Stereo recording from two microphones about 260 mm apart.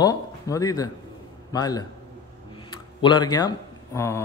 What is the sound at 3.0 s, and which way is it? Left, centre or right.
A man's voice, centre.